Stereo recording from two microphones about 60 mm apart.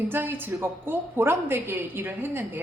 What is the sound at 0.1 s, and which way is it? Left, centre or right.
Speech, right.